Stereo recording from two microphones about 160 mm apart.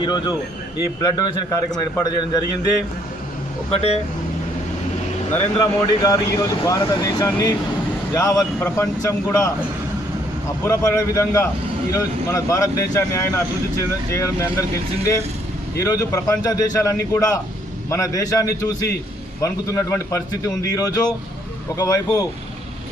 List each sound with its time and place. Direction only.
0.0 s speech: 25° left (ahead or behind)
3.7 s speech: 40° left (ahead or behind)
5.5 s speech: 20° left (ahead or behind)
10.6 s speech: 20° left (ahead or behind)
15.8 s speech: 20° left (ahead or behind)